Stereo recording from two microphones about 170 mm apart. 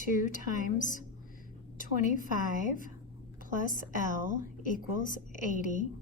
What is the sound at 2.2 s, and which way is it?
Speech, 50° right (ahead or behind).